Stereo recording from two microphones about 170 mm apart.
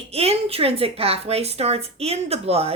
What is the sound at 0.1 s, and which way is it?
A woman's voice, 35° right (ahead or behind).